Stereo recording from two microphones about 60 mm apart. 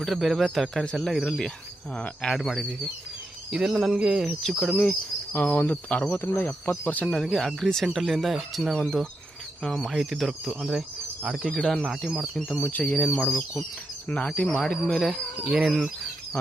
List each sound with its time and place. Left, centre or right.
0.0 s speech: centre
4.9 s speech: left
6.1 s speech: left
6.7 s speech: left
7.1 s speech: centre
10.7 s speech: centre
11.5 s speech: centre
12.9 s speech: left
13.1 s speech: centre
14.1 s speech: left; by 15.9 s centre